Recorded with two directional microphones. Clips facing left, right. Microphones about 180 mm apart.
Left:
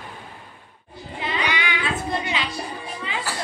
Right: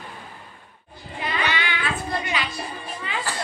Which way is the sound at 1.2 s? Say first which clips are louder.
Even; 15° left (ahead or behind).